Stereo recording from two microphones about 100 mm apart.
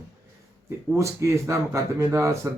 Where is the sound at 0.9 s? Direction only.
30° right (ahead or behind).